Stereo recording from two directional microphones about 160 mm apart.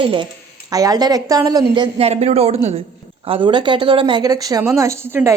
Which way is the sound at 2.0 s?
40° right (ahead or behind).